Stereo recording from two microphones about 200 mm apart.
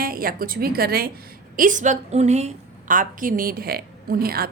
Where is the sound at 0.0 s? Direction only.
45° right (ahead or behind).